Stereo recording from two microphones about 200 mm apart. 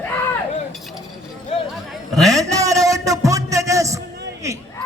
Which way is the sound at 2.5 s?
15° right (ahead or behind).